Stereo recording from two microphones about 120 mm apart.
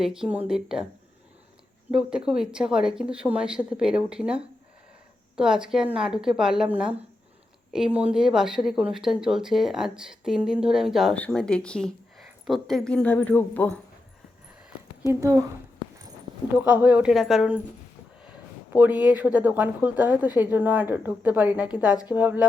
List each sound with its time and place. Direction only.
0.0 s speech: 5° right (ahead or behind)
1.9 s speech: 5° right (ahead or behind)
11.1 s speech: 10° left (ahead or behind)
15.1 s speech: 25° right (ahead or behind)
16.6 s speech: 10° right (ahead or behind)
17.2 s speech: centre (ahead or behind)
18.2 s speech: 10° right (ahead or behind)